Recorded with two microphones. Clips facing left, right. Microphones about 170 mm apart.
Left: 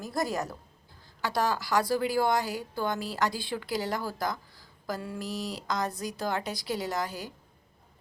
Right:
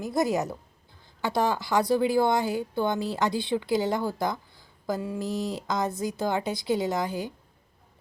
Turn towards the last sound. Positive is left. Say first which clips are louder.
# right 5 dB
turn(degrees=-20)  # may be behind; listen again after turning